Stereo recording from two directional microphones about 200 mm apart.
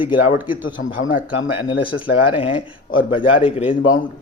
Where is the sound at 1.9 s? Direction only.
90° left.